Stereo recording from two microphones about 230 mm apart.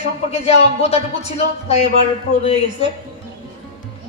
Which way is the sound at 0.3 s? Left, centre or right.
Left.